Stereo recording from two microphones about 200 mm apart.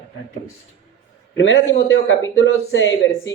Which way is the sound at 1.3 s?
65° left (ahead or behind).